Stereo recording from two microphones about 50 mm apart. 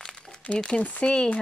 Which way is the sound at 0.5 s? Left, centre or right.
Centre.